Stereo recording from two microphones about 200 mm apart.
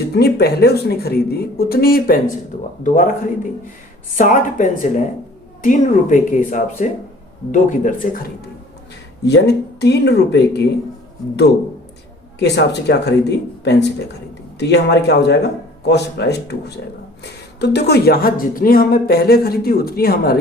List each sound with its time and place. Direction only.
0.1 s speech: 55° left (ahead or behind)
9.2 s speech: 55° left (ahead or behind)
12.4 s speech: 60° left (ahead or behind)